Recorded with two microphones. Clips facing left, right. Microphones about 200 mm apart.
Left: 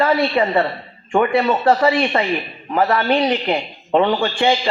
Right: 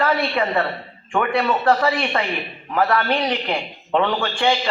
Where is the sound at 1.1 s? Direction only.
20° left (ahead or behind).